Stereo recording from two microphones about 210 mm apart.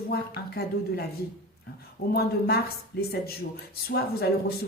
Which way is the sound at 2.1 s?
50° left (ahead or behind).